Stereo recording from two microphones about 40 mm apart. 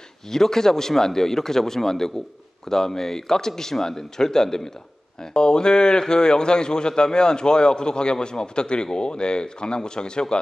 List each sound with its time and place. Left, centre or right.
0.3 s a man's voice: centre